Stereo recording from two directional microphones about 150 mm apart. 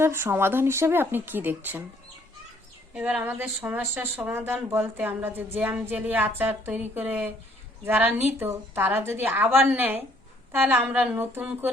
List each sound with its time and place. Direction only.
0.0 s speech: 15° right (ahead or behind)
2.9 s speech: 5° right (ahead or behind)